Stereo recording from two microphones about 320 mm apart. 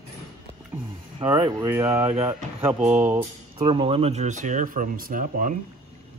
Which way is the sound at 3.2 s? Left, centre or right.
Centre.